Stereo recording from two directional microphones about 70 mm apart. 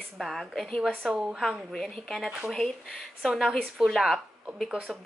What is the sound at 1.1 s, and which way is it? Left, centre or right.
Speech, centre.